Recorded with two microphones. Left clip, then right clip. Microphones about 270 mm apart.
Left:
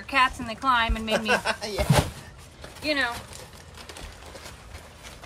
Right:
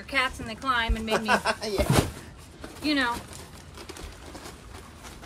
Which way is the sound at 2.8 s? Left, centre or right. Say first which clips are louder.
Left 1 dB; centre.